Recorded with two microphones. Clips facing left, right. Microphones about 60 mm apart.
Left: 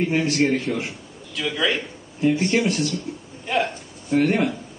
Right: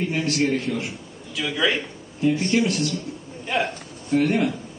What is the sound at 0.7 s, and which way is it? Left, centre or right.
Speech, left.